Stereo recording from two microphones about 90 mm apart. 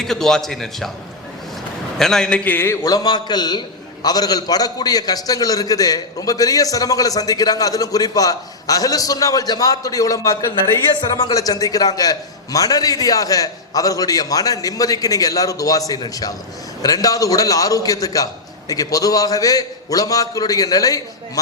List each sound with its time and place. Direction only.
0.0 s a man's voice: 5° left (ahead or behind)
2.0 s a man's voice: 5° left (ahead or behind)
2.4 s a man's voice: 25° left (ahead or behind)
2.8 s a man's voice: 45° left (ahead or behind)